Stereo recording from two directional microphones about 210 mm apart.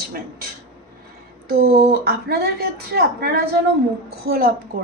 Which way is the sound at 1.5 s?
50° right (ahead or behind).